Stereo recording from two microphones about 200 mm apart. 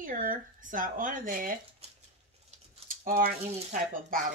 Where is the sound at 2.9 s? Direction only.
45° right (ahead or behind).